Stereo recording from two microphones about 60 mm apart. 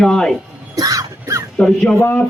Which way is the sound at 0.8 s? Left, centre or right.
Right.